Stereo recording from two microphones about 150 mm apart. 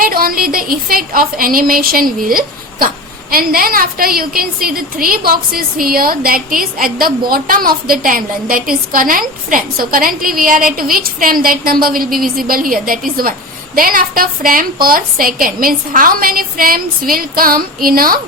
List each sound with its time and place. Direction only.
0.0 s a woman's voice: 75° right (ahead or behind)